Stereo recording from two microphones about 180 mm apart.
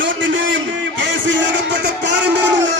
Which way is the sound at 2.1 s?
75° right (ahead or behind).